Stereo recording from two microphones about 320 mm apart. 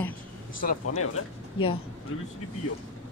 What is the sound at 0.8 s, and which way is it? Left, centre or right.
Speech, left.